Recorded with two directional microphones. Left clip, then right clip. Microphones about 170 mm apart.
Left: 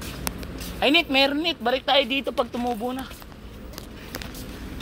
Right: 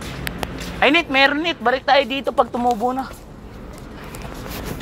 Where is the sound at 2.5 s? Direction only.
5° left (ahead or behind).